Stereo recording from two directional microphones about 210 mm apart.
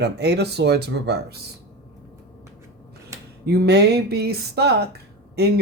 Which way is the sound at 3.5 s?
50° right (ahead or behind).